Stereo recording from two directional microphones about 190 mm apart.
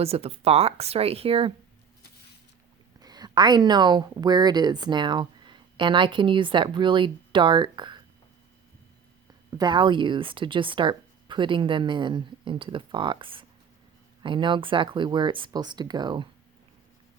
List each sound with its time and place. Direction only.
0.0 s speech: 30° right (ahead or behind)
3.0 s speech: 20° right (ahead or behind)
9.6 s speech: 25° right (ahead or behind)